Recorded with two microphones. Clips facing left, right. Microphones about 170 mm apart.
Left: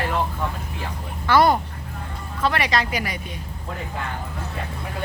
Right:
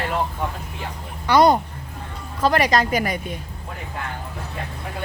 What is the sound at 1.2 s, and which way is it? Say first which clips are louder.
Speech: right 2 dB; 20° right (ahead or behind).